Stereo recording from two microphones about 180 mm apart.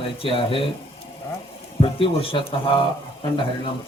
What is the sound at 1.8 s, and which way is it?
Speech, 30° left (ahead or behind).